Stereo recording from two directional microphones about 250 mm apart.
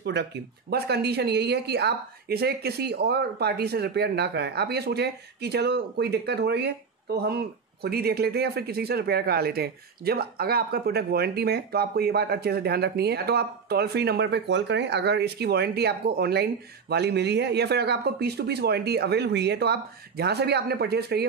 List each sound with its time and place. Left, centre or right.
0.0 s speech: right